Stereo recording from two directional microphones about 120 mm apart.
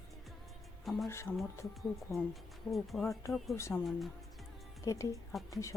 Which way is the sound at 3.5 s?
20° left (ahead or behind).